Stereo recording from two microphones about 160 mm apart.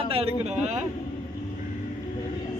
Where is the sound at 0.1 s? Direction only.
40° right (ahead or behind).